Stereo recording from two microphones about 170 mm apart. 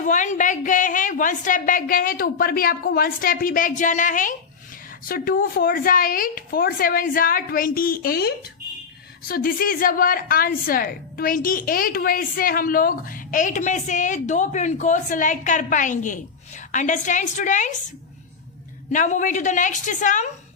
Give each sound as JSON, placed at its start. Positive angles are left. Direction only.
{"t": 0.0, "sound": "a woman's voice", "side_deg": 50}
{"t": 18.9, "sound": "a woman's voice", "side_deg": 45}